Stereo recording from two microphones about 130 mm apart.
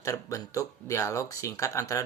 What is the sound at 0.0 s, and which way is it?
Speech, 25° left (ahead or behind).